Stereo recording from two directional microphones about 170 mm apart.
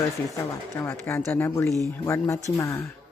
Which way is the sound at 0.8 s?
15° left (ahead or behind).